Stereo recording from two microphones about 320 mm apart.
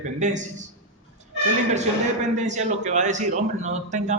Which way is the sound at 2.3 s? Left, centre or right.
Right.